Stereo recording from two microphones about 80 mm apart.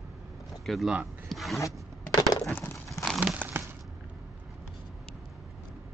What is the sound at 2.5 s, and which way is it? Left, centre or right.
Crumpling, left.